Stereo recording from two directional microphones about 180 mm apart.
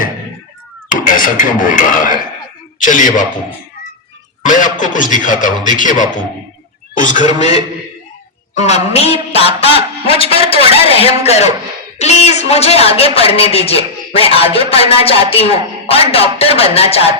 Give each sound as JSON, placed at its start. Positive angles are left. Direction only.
{"t": 0.9, "sound": "a man's voice", "side_deg": 50}
{"t": 4.4, "sound": "a man's voice", "side_deg": 45}